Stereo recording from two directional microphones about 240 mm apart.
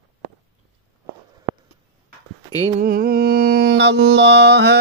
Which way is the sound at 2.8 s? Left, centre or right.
Right.